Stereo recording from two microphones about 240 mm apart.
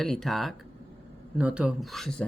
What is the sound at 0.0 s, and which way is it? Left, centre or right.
Speech, centre.